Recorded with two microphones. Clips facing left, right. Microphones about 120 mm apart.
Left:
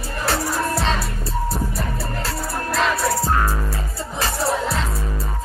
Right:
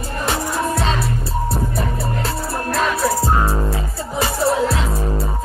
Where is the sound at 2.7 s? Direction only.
Centre (ahead or behind).